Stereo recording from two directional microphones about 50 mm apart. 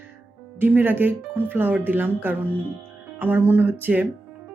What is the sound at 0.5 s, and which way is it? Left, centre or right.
Speech, right.